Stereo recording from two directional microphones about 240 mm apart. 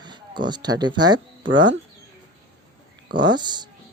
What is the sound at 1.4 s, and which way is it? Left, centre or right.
Speech, right.